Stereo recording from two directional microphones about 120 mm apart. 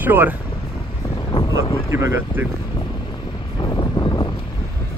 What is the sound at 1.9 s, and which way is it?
Speech, 20° right (ahead or behind).